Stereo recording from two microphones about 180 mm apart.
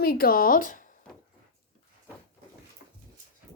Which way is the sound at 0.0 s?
55° left (ahead or behind).